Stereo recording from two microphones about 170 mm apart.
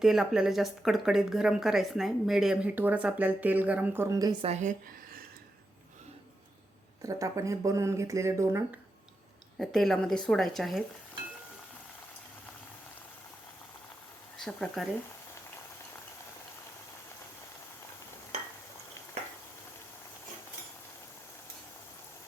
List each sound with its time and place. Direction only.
0.0 s speech: 5° right (ahead or behind); by 4.4 s 20° right (ahead or behind)
4.4 s speech: 45° right (ahead or behind)
7.0 s speech: 20° right (ahead or behind)
9.6 s speech: centre (ahead or behind)
14.3 s speech: centre (ahead or behind)